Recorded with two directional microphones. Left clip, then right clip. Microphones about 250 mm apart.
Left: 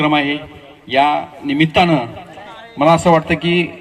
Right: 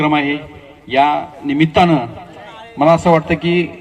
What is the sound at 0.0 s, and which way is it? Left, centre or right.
A man's voice, left.